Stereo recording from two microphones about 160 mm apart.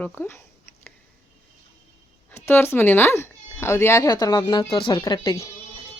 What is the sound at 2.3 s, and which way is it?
Speech, 15° left (ahead or behind).